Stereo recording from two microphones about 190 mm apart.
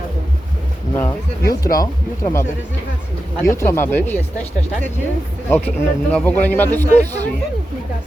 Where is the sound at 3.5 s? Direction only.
15° left (ahead or behind).